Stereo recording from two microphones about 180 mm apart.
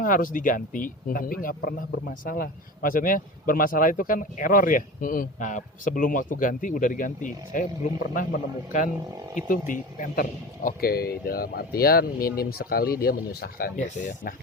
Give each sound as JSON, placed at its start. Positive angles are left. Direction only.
{"t": 0.0, "sound": "speech", "side_deg": 50}
{"t": 8.7, "sound": "speech", "side_deg": 45}